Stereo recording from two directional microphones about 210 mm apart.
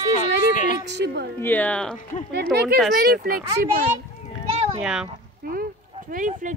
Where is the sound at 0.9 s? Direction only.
55° right (ahead or behind).